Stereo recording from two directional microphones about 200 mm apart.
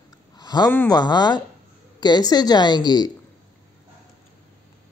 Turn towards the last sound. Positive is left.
turn(degrees=20)  # may be behind; listen again after turning